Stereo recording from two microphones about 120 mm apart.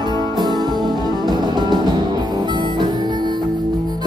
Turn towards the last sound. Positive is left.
turn(degrees=-35)  # may be behind; listen again after turning